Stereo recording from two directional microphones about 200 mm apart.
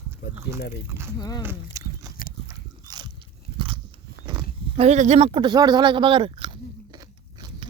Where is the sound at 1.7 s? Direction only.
15° right (ahead or behind).